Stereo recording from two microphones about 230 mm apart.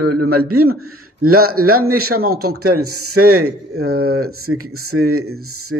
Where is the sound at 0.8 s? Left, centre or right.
Right.